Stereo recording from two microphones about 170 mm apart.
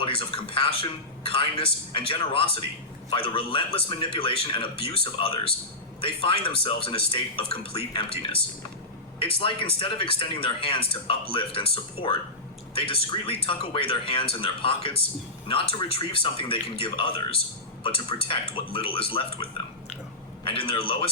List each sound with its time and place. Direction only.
0.0 s a man's voice: 30° left (ahead or behind)